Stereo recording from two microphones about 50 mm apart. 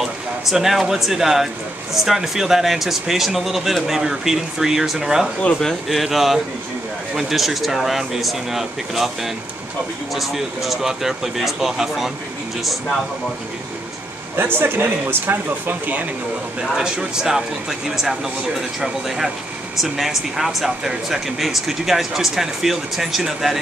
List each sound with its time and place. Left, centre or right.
0.0 s speech: centre
14.3 s speech: right
16.7 s speech: centre